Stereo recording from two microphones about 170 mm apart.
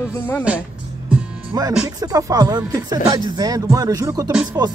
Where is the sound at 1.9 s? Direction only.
20° right (ahead or behind).